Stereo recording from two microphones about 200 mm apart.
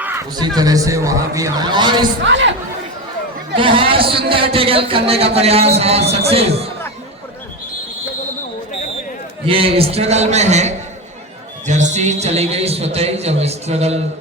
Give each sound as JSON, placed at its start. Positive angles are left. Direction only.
{"t": 0.0, "sound": "a sound", "side_deg": -10}
{"t": 0.3, "sound": "a man's voice", "side_deg": -20}
{"t": 2.2, "sound": "speech", "side_deg": -65}
{"t": 3.5, "sound": "speech", "side_deg": -25}
{"t": 9.5, "sound": "a man's voice", "side_deg": -30}